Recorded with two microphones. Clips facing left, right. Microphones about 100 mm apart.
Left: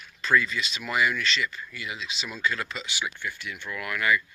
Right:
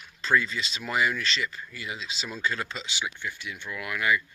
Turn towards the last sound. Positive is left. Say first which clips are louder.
# left 1 dB
turn(degrees=-15)  # may be behind; listen again after turning